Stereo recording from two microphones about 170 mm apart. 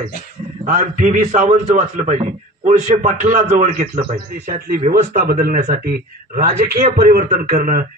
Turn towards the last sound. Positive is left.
turn(degrees=-55)  # may be behind; listen again after turning